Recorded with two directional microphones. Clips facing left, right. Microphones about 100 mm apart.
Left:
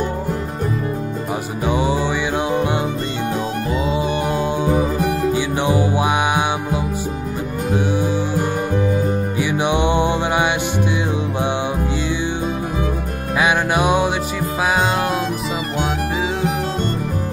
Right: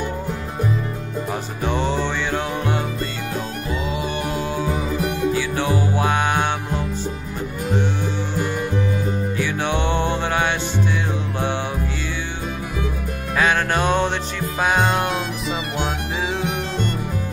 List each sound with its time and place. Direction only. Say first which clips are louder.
1.6 s music: left 3 dB; 10° left (ahead or behind)
3.7 s music: left 4 dB; 25° left (ahead or behind)
4.7 s music: left 5 dB; 35° left (ahead or behind)
5.3 s music: left 3 dB; 20° left (ahead or behind)
9.4 s music: left 5 dB; 15° left (ahead or behind)
13.4 s music: left 2 dB; 15° left (ahead or behind)